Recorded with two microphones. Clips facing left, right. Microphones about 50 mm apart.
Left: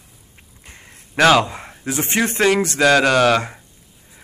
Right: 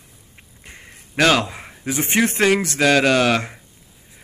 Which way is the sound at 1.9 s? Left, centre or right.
Centre.